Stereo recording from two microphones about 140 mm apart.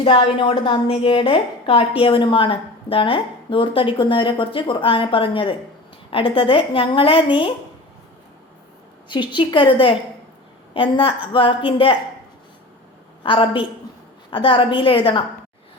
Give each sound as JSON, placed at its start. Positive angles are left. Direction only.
{"t": 0.0, "sound": "a woman's voice", "side_deg": 40}
{"t": 9.0, "sound": "a woman's voice", "side_deg": 35}
{"t": 13.2, "sound": "a woman's voice", "side_deg": 35}